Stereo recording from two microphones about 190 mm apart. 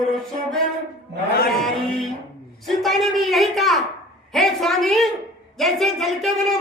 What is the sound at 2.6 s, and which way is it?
Speech, centre (ahead or behind).